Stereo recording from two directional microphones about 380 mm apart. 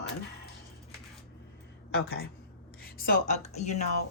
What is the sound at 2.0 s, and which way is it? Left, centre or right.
Speech, left.